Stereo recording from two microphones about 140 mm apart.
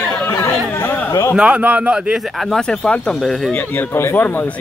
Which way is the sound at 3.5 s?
15° left (ahead or behind).